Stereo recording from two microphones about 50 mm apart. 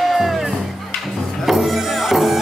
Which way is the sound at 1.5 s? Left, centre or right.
Centre.